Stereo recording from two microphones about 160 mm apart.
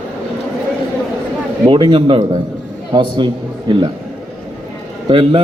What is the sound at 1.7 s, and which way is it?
Speech, 30° right (ahead or behind).